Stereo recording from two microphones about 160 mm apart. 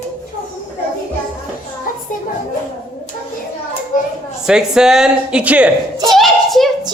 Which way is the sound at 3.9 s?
60° left (ahead or behind).